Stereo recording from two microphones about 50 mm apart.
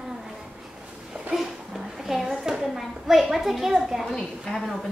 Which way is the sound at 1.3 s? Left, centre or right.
Centre.